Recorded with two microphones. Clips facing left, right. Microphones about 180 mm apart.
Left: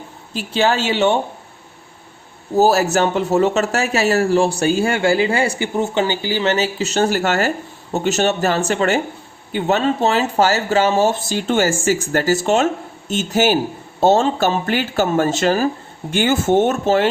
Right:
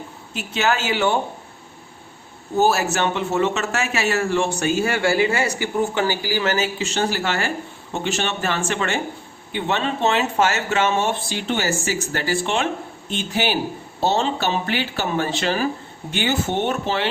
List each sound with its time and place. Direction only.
0.3 s speech: 30° left (ahead or behind)
2.6 s a man's voice: 40° left (ahead or behind)
6.7 s a man's voice: 40° left (ahead or behind)